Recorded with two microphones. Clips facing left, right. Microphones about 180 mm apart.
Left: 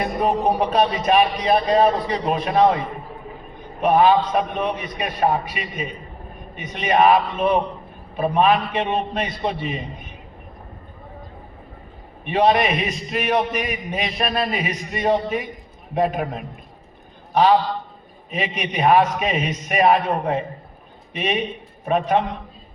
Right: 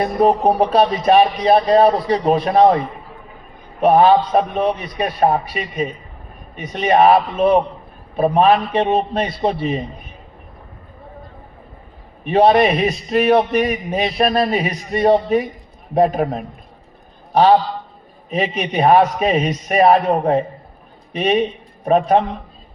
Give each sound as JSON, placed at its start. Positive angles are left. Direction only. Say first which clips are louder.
{"t": 0.0, "sound": "a man's voice", "louder": "right 5 dB", "side_deg": -35}
{"t": 12.2, "sound": "a man's voice", "louder": "right 5 dB", "side_deg": -40}